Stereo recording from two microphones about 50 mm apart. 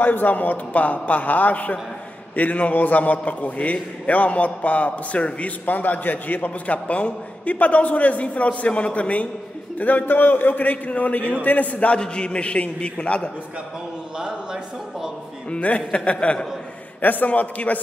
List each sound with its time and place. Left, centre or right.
0.0 s a man's voice: left
14.1 s speech: centre
15.5 s a man's voice: left
17.0 s a man's voice: left